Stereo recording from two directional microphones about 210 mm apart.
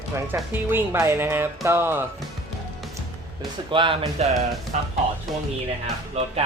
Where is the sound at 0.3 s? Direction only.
10° right (ahead or behind).